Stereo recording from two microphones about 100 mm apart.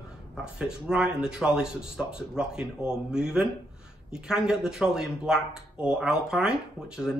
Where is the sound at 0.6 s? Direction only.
10° right (ahead or behind).